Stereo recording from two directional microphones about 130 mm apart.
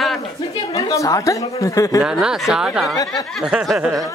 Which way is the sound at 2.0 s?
5° right (ahead or behind).